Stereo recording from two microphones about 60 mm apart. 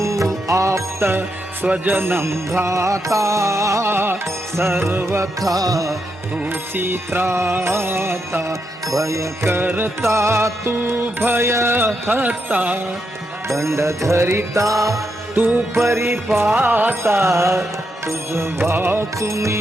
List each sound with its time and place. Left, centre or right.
0.0 s music: right
1.6 s music: right
2.0 s music: right
3.9 s music: right
5.4 s music: right
6.4 s music: right
8.9 s music: right
10.0 s music: right
13.6 s music: right
15.7 s music: right
16.6 s music: right
16.9 s music: right
19.2 s music: right